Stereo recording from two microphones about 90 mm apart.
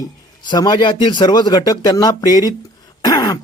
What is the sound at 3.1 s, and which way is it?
Throat clearing, 45° left (ahead or behind).